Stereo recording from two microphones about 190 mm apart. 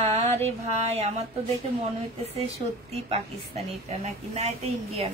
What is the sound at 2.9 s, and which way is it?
A woman's voice, 30° right (ahead or behind).